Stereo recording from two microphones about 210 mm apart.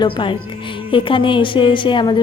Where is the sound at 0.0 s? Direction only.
20° left (ahead or behind).